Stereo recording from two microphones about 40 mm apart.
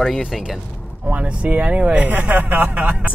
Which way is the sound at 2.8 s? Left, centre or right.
Right.